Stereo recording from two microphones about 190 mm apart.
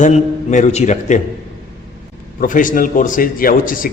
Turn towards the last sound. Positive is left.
turn(degrees=45)  # may be behind; listen again after turning